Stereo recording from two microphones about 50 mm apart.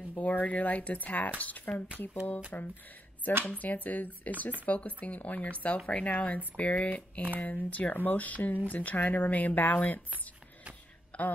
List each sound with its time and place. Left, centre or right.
0.2 s speech: left
1.7 s speech: left
2.2 s speech: left
11.1 s a sound: left